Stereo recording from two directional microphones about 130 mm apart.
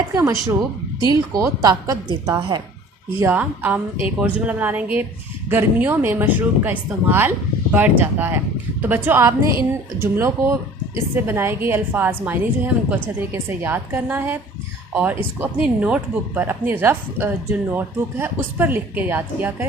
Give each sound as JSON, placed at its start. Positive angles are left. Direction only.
{"t": 0.1, "sound": "a woman's voice", "side_deg": -20}
{"t": 3.2, "sound": "speech", "side_deg": -15}